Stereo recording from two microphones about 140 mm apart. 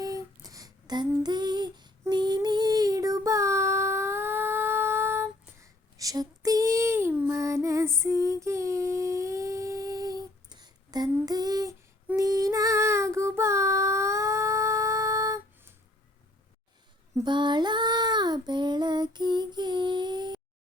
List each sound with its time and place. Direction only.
0.0 s a sound: 25° right (ahead or behind)
1.2 s female singing: 30° right (ahead or behind)
12.1 s child singing: 25° right (ahead or behind)
17.2 s child singing: 35° right (ahead or behind)